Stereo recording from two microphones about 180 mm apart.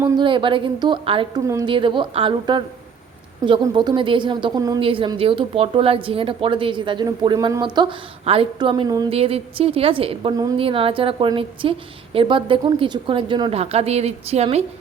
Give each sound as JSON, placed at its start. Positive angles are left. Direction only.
{"t": 0.2, "sound": "a woman's voice", "side_deg": -30}